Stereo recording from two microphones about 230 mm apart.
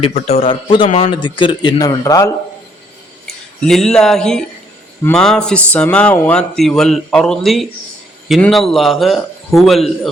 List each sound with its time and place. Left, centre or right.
0.1 s a man's voice: left
3.2 s speech: centre